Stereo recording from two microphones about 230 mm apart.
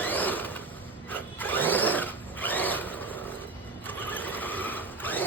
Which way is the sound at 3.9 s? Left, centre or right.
Centre.